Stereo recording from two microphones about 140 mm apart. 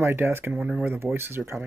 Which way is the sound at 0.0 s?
15° right (ahead or behind).